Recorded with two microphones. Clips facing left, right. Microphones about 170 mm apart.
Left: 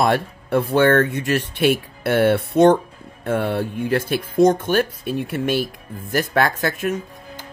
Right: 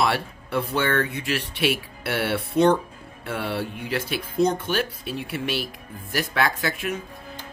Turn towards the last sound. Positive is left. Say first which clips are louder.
# left 4 dB
turn(degrees=45)  # may be behind; listen again after turning